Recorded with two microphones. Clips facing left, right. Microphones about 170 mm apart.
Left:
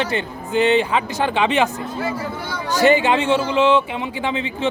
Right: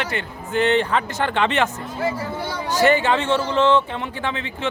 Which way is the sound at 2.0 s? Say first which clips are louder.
Right 2 dB; 25° right (ahead or behind).